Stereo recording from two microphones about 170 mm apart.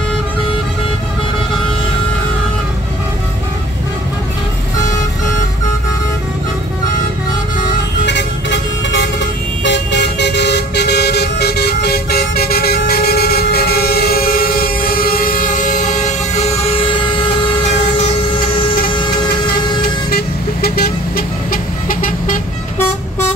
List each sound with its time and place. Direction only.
8.0 s vehicle: 90° left; by 17.3 s 30° left (ahead or behind)
18.3 s vehicle: 30° left (ahead or behind)
20.1 s vehicle: 65° left (ahead or behind)